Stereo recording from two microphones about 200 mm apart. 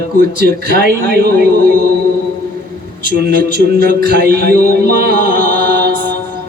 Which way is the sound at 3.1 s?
50° right (ahead or behind).